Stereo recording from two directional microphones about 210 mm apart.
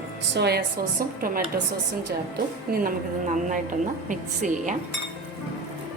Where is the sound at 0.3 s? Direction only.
50° right (ahead or behind).